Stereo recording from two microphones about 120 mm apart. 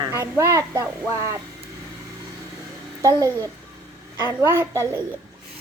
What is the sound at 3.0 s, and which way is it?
A woman's voice, 30° right (ahead or behind).